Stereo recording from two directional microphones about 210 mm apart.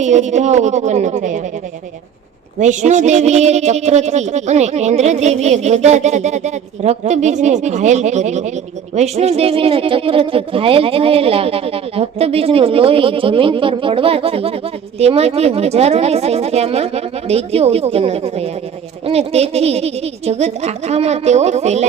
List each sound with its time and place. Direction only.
0.0 s speech: 35° right (ahead or behind)
2.6 s speech: 35° right (ahead or behind)